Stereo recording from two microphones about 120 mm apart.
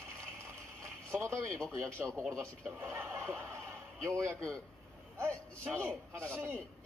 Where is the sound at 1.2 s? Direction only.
25° right (ahead or behind).